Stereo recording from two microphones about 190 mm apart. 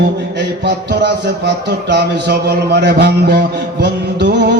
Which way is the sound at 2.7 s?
60° right (ahead or behind).